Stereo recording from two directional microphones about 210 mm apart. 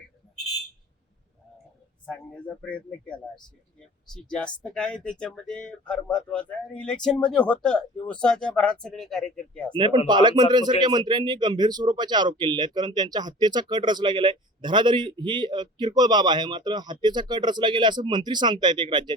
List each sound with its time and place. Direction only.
2.0 s speech: 5° left (ahead or behind)
9.7 s speech: 25° right (ahead or behind)